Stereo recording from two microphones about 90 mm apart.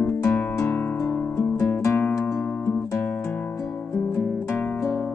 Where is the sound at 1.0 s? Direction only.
35° left (ahead or behind).